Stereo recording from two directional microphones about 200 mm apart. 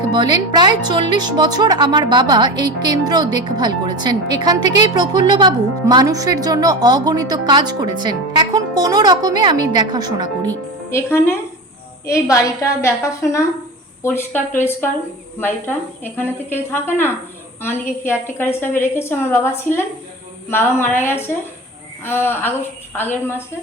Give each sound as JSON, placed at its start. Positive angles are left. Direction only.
{"t": 0.1, "sound": "speech", "side_deg": -20}
{"t": 10.9, "sound": "a woman's voice", "side_deg": 10}